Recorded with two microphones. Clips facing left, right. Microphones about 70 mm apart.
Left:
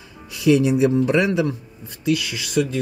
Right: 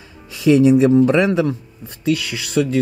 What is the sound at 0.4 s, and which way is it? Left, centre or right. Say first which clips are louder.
Speech: right 4 dB; right.